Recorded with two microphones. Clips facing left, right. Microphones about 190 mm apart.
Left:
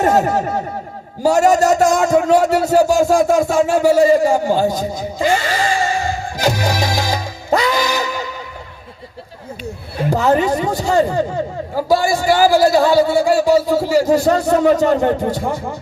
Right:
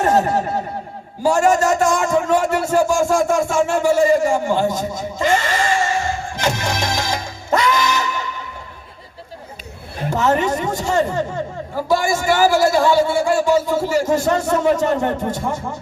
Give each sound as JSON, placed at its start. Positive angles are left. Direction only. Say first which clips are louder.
{"t": 1.2, "sound": "a man's voice", "louder": "left 3 dB", "side_deg": 40}
{"t": 3.7, "sound": "a sound", "louder": "left 3 dB", "side_deg": 35}
{"t": 10.1, "sound": "a man's voice", "louder": "left 3 dB", "side_deg": 35}